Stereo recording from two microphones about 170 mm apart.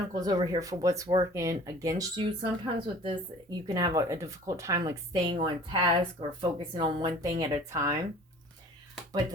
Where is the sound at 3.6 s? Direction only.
20° right (ahead or behind).